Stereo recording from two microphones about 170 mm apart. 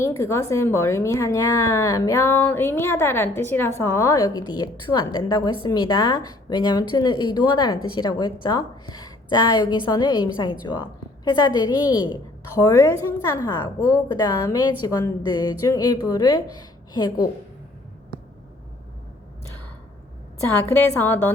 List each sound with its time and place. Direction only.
0.2 s a woman's voice: 15° left (ahead or behind)
20.4 s a woman's voice: 15° left (ahead or behind)